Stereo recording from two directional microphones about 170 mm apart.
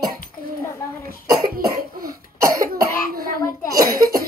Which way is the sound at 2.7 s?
60° right (ahead or behind).